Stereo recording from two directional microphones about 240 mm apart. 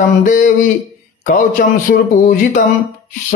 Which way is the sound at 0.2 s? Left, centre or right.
Left.